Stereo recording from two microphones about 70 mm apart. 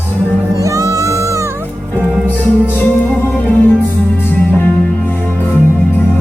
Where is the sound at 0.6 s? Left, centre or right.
Right.